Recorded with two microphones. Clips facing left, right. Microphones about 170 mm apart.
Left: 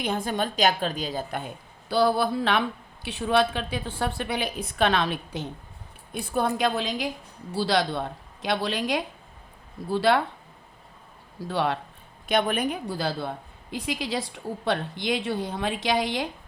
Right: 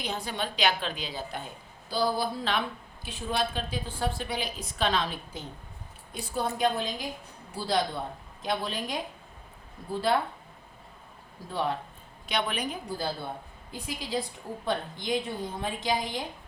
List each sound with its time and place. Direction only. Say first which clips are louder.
0.0 s a woman's voice: left 6 dB; 50° left (ahead or behind)
1.9 s a woman's voice: left 6 dB; 65° left (ahead or behind)
6.1 s a woman's voice: left 5 dB; 55° left (ahead or behind); by 10.2 s 80° left
11.4 s a woman's voice: left 4 dB; 75° left (ahead or behind)
12.3 s a woman's voice: left 7 dB; 50° left (ahead or behind)
12.7 s a woman's voice: left 4 dB; 80° left